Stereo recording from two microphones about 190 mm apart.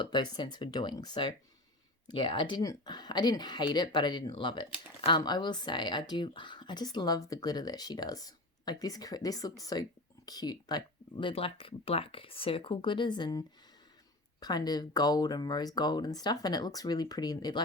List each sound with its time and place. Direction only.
0.0 s speech: 25° left (ahead or behind)